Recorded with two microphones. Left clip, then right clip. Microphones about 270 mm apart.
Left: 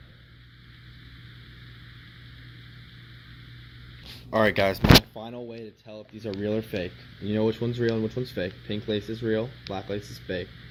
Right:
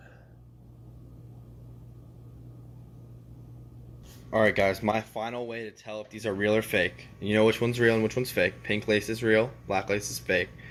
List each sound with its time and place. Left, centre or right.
4.3 s speech: centre
5.1 s speech: right